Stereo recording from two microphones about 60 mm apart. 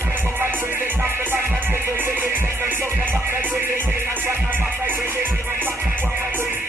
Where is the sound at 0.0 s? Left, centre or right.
Right.